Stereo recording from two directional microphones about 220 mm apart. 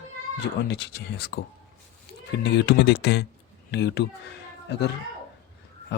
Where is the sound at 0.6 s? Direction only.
50° left (ahead or behind).